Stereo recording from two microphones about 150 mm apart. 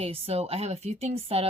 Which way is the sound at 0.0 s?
40° right (ahead or behind).